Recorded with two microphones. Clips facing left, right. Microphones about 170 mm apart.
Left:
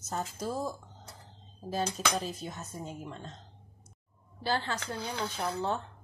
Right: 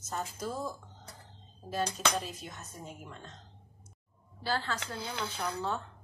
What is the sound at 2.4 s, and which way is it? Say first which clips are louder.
Speech: left 5 dB; 35° left (ahead or behind).